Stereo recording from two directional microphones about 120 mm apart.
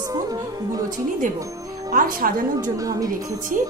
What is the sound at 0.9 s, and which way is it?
Speech, 90° right.